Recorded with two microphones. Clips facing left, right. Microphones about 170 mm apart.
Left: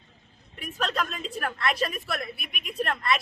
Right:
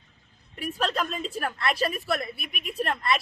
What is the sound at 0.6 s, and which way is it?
A woman's voice, 35° right (ahead or behind).